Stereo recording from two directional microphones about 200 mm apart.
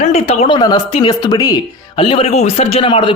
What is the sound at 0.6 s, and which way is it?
Speech, 20° left (ahead or behind).